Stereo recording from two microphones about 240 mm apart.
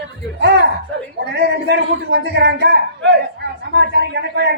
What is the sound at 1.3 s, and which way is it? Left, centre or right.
A woman's voice, right.